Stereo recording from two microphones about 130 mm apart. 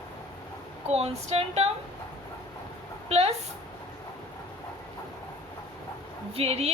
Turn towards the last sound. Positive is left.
turn(degrees=-50)  # may be behind; listen again after turning